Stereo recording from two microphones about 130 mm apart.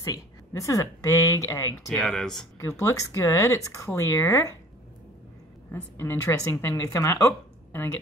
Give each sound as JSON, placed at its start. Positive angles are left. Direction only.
{"t": 0.0, "sound": "speech", "side_deg": 25}
{"t": 2.0, "sound": "speech", "side_deg": 5}
{"t": 2.8, "sound": "speech", "side_deg": 25}
{"t": 5.7, "sound": "speech", "side_deg": 20}